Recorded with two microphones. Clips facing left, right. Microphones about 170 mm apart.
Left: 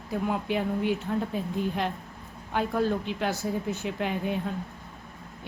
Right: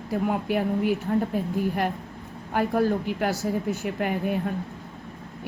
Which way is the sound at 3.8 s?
60° right (ahead or behind).